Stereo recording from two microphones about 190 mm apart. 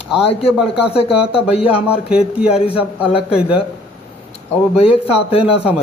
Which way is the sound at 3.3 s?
5° right (ahead or behind).